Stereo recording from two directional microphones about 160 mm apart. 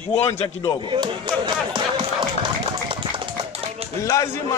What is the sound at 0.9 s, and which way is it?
Speech, 30° right (ahead or behind).